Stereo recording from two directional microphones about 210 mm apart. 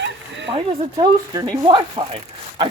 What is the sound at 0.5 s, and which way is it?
Speech, 20° right (ahead or behind).